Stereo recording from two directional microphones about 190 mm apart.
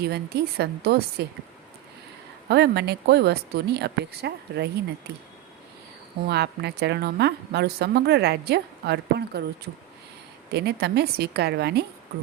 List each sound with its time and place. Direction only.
0.0 s a woman's voice: 60° right (ahead or behind)
2.5 s a woman's voice: 60° right (ahead or behind)
10.5 s a woman's voice: 60° right (ahead or behind)